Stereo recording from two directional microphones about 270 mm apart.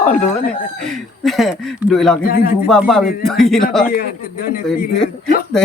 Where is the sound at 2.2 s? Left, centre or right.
Left.